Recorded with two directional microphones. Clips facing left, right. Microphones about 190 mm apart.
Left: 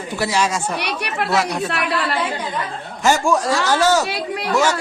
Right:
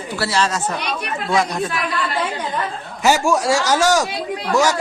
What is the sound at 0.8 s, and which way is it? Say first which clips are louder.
Speech: left 1 dB; 70° left (ahead or behind).